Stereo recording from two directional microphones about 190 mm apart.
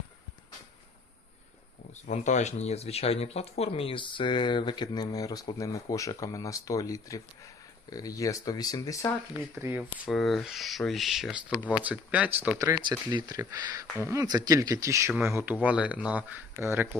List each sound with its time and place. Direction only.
1.9 s speech: 40° left (ahead or behind); by 9.1 s 15° left (ahead or behind)
9.6 s speech: 10° right (ahead or behind)
10.1 s speech: centre (ahead or behind)
11.5 s speech: 10° left (ahead or behind)
11.8 s speech: 5° right (ahead or behind)